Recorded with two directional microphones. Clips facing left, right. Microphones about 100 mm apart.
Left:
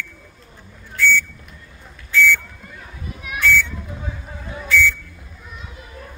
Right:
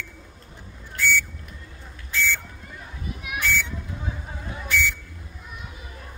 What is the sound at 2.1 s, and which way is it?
Buzzer, 20° right (ahead or behind).